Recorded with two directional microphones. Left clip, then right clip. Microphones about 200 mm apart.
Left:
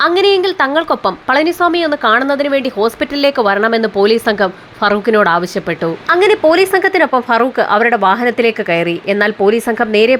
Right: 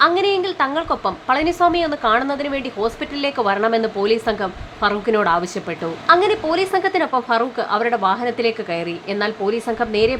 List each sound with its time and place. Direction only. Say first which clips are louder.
0.0 s a woman's voice: left 5 dB; 30° left (ahead or behind)